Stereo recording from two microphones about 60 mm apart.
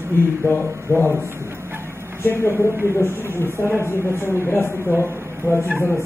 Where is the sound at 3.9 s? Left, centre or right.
Left.